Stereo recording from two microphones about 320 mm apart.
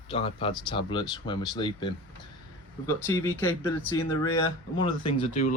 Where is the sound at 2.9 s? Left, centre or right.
Centre.